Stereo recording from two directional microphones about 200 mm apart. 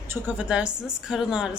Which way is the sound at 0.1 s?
5° right (ahead or behind).